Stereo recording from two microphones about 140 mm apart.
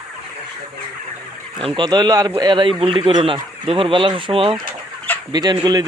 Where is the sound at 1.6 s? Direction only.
30° right (ahead or behind).